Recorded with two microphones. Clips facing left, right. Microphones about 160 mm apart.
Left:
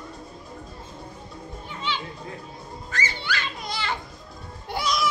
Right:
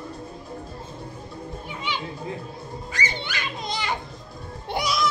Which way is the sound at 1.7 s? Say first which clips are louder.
Left 1 dB; 10° right (ahead or behind).